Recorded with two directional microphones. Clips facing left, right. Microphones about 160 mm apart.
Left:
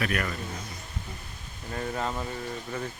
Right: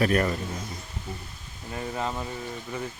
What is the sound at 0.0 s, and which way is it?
Speech, 35° right (ahead or behind).